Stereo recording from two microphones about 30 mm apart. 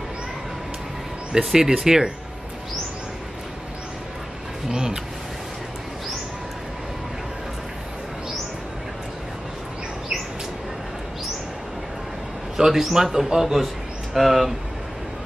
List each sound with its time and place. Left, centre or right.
1.3 s speech: centre
4.6 s speech: right
12.6 s speech: right
12.9 s a man's voice: centre